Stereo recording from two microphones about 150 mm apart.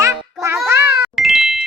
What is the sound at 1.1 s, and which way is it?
Music, centre (ahead or behind).